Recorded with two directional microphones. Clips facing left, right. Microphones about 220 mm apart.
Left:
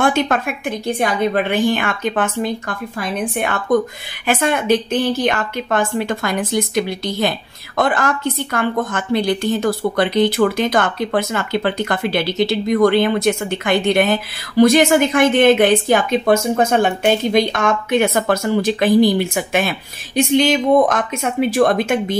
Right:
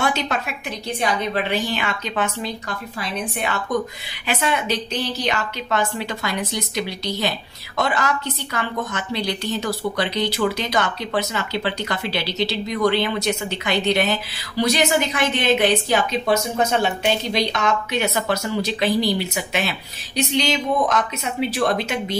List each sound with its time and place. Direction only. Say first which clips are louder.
0.0 s a woman's voice: left 6 dB; 50° left (ahead or behind)